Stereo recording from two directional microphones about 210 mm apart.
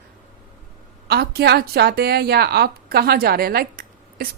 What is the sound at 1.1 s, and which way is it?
A woman's voice, 50° right (ahead or behind).